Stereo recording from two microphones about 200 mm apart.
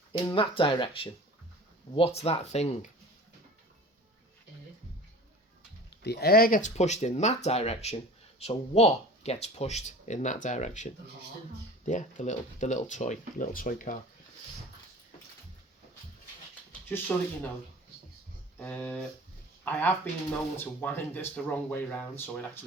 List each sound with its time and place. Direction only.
0.1 s speech: 25° left (ahead or behind)
6.0 s speech: 55° left (ahead or behind); by 10.8 s 35° left (ahead or behind)
11.9 s speech: 40° left (ahead or behind)
16.9 s speech: 10° left (ahead or behind)
18.6 s speech: 5° left (ahead or behind)